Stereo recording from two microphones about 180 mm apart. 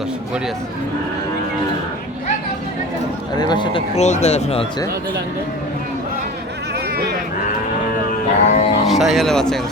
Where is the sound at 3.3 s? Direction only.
25° left (ahead or behind).